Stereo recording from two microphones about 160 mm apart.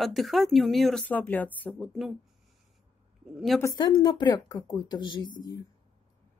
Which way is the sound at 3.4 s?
Centre (ahead or behind).